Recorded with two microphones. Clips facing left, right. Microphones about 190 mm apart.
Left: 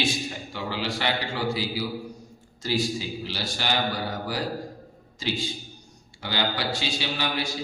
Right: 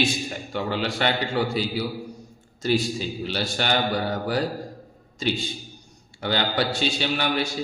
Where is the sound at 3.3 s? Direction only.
55° right (ahead or behind).